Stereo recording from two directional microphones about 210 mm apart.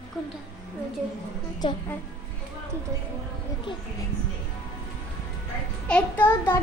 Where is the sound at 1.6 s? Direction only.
20° left (ahead or behind).